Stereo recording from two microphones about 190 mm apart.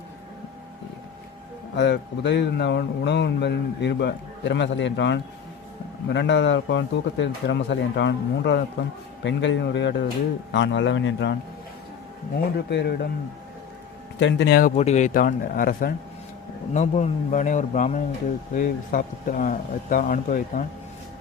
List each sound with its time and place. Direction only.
1.7 s a man's voice: 65° left (ahead or behind)
12.7 s speech: 60° left (ahead or behind)
14.2 s speech: 75° left (ahead or behind); by 14.7 s 60° left (ahead or behind)
14.8 s speech: 35° left (ahead or behind)
16.7 s speech: 35° left (ahead or behind)